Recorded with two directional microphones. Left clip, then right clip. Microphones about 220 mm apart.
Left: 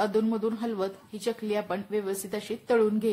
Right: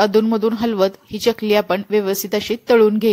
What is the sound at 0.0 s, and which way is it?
Speech, 35° right (ahead or behind).